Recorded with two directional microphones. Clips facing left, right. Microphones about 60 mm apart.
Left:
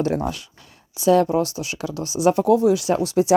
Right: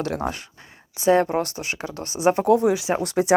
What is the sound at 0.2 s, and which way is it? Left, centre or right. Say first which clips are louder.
Speech: left 1 dB; right.